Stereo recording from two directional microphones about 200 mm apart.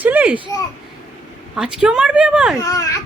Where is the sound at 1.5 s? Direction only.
5° right (ahead or behind).